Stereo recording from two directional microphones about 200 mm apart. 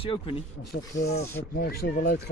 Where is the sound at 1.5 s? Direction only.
50° left (ahead or behind).